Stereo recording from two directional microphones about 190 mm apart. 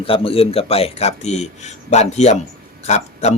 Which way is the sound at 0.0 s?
30° left (ahead or behind).